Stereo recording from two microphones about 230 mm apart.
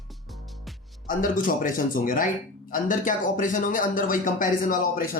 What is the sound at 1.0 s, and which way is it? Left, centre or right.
Speech, left.